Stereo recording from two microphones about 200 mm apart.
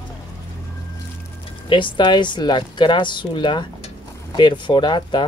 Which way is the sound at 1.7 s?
25° left (ahead or behind).